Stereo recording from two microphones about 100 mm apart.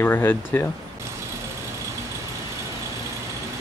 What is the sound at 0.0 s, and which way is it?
Speech, 20° left (ahead or behind).